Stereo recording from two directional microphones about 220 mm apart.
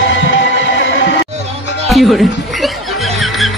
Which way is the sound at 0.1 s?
55° left (ahead or behind).